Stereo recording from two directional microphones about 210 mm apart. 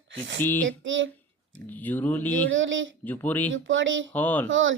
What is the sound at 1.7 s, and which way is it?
Speech, 10° left (ahead or behind).